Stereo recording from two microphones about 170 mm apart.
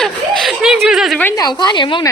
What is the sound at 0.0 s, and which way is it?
Chuckle, centre (ahead or behind).